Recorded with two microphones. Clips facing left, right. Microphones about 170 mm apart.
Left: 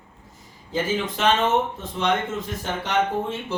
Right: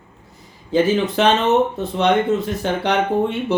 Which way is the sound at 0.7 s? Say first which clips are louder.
Right 9 dB; 65° right (ahead or behind).